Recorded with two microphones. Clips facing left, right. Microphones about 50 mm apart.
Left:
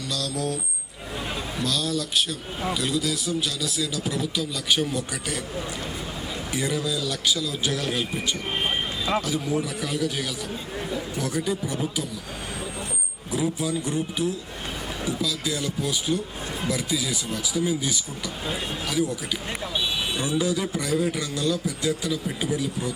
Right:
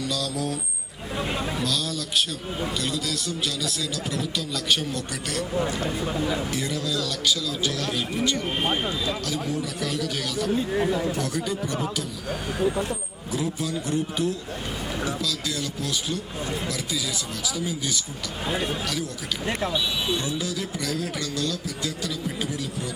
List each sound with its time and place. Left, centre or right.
0.0 s a man's voice: centre
1.6 s a man's voice: centre
6.5 s a man's voice: centre
13.3 s speech: centre